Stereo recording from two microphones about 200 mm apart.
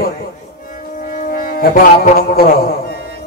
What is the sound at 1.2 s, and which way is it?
Music, 45° left (ahead or behind).